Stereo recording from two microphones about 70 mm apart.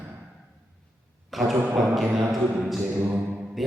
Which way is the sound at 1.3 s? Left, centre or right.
Centre.